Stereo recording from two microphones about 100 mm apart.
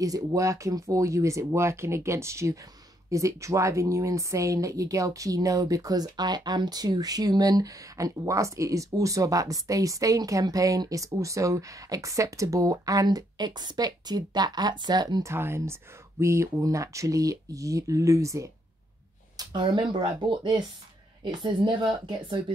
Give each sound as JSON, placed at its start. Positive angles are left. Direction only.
{"t": 0.0, "sound": "speech", "side_deg": -35}
{"t": 15.2, "sound": "speech", "side_deg": -25}
{"t": 19.3, "sound": "speech", "side_deg": -50}